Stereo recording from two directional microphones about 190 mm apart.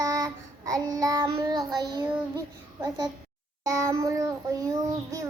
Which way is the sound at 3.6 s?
15° right (ahead or behind).